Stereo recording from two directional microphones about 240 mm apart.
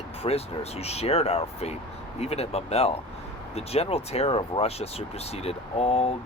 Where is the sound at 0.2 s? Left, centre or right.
Left.